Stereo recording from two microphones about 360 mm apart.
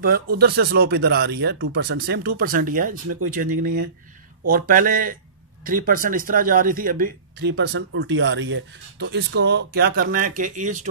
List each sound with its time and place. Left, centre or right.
0.4 s speech: right